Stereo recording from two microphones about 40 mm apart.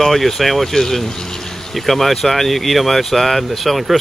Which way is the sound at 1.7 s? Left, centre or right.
Centre.